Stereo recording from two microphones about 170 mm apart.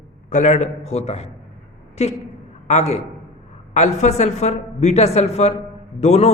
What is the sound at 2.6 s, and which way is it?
A man's voice, 40° left (ahead or behind).